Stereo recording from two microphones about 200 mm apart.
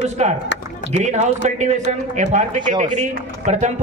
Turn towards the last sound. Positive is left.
turn(degrees=-35)  # may be behind; listen again after turning